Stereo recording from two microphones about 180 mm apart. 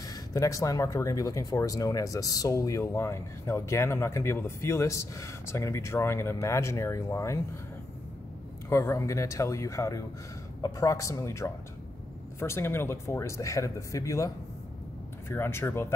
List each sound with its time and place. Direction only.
0.1 s speech: 20° left (ahead or behind)
8.6 s speech: 15° left (ahead or behind)